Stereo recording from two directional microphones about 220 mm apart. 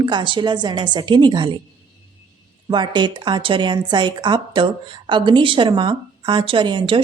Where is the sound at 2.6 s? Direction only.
20° right (ahead or behind).